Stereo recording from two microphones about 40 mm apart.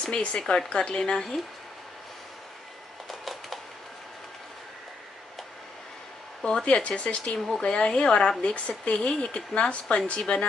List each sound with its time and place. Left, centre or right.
0.0 s speech: left
3.1 s a sound: centre
6.6 s speech: left
7.3 s speech: centre
7.6 s speech: left
8.4 s speech: left